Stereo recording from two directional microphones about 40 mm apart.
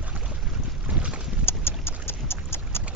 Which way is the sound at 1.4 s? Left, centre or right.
Left.